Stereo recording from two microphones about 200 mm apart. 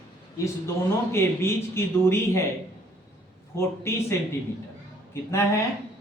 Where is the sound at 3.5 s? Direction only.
15° left (ahead or behind).